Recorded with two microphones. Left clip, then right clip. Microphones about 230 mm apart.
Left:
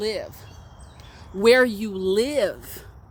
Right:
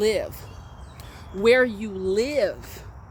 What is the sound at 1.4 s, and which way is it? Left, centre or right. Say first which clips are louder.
Speech: left 2 dB; left.